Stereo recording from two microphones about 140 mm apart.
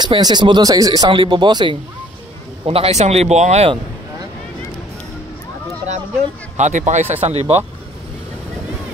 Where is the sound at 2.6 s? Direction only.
45° right (ahead or behind).